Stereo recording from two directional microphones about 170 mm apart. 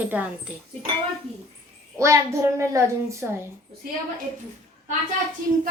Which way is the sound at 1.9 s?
15° right (ahead or behind).